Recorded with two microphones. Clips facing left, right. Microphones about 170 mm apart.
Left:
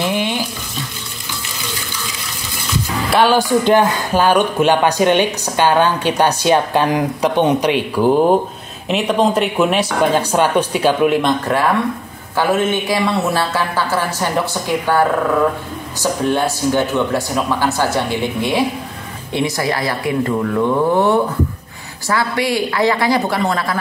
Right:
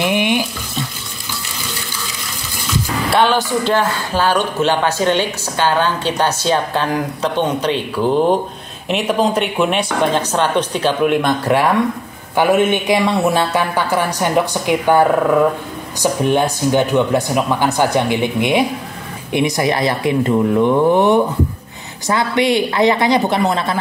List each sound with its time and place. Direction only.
0.0 s frying: 15° right (ahead or behind)
3.1 s speech: 5° left (ahead or behind)
8.8 s speech: centre (ahead or behind)
12.4 s speech: 15° right (ahead or behind)